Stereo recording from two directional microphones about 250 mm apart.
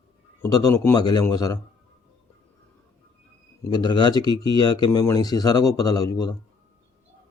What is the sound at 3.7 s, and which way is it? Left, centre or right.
Speech, centre.